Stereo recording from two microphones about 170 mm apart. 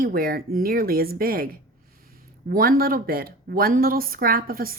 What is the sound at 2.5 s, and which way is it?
A woman's voice, 60° right (ahead or behind).